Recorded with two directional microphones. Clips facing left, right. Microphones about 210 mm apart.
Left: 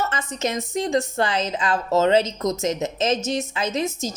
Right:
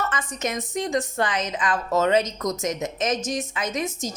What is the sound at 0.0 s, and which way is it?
A woman's voice, 25° left (ahead or behind).